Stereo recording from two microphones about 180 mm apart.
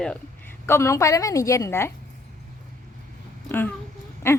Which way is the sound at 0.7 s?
15° left (ahead or behind).